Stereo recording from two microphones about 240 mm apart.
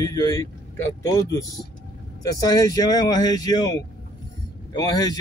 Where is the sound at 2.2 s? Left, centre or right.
Centre.